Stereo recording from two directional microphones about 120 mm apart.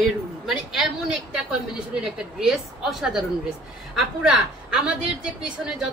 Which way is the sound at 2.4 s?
5° right (ahead or behind).